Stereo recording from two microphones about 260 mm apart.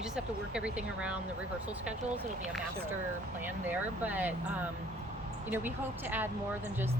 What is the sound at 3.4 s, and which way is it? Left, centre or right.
Speech, centre.